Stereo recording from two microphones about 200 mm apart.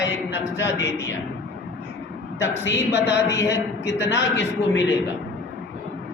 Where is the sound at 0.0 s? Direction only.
65° left (ahead or behind).